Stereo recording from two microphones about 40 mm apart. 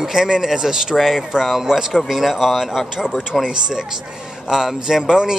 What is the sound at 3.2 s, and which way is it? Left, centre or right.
Speech, centre.